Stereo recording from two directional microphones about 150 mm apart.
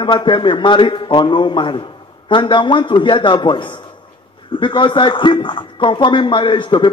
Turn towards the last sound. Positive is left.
turn(degrees=35)  # may be behind; listen again after turning